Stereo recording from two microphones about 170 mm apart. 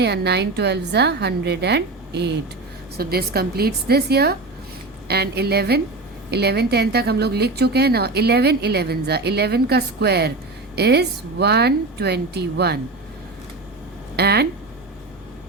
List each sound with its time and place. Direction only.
0.0 s a woman's voice: 80° right
3.0 s a woman's voice: 65° right (ahead or behind)
14.2 s a woman's voice: 70° right (ahead or behind)